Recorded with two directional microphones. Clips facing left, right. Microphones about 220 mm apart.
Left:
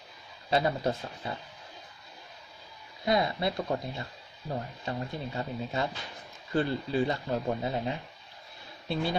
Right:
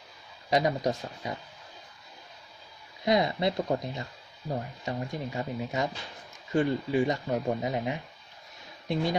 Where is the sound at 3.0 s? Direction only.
20° right (ahead or behind).